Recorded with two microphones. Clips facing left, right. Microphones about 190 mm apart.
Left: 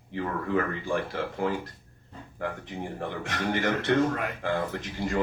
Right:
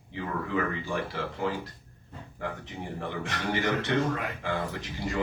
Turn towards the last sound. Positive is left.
turn(degrees=55)  # may be behind; listen again after turning